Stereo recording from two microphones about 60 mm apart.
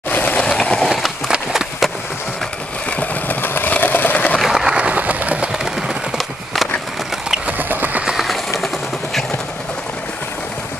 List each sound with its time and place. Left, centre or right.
0.1 s train: left
0.4 s train: centre
1.3 s run: centre
2.9 s vehicle: left
4.4 s vehicle: centre
4.7 s a sound: right
5.5 s skateboard: centre
7.4 s a sound: right
8.0 s train: centre